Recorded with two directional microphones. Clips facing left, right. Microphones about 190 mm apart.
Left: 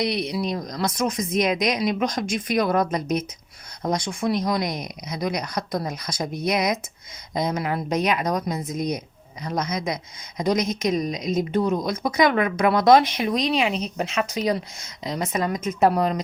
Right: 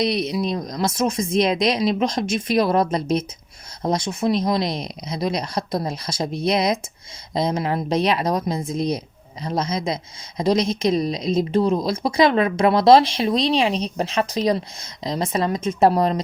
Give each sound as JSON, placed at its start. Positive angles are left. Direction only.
{"t": 0.0, "sound": "a woman's voice", "side_deg": -20}